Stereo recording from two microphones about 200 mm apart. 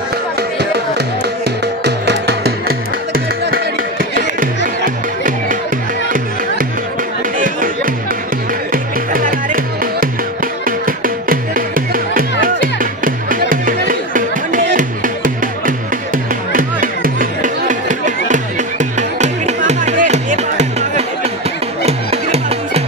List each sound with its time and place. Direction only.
0.4 s music: 55° right (ahead or behind)
7.3 s music: 45° right (ahead or behind)